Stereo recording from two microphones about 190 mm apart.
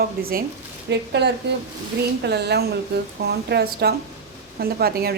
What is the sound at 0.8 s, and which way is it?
A woman's voice, 65° right (ahead or behind).